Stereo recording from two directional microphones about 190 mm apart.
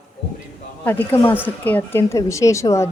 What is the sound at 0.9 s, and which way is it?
Speech, 10° left (ahead or behind).